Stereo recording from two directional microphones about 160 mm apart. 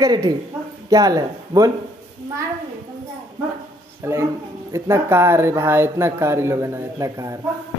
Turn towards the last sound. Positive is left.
turn(degrees=-20)  # may be behind; listen again after turning